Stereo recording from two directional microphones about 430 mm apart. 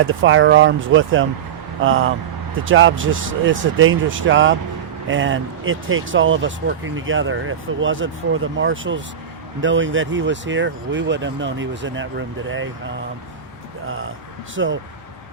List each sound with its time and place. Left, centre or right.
0.0 s speech: right
14.5 s speech: right